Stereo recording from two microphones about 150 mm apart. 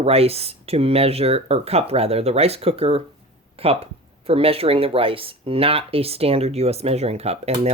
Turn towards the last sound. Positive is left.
turn(degrees=-45)  # may be behind; listen again after turning